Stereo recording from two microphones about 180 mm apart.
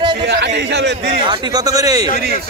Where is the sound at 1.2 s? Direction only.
25° right (ahead or behind).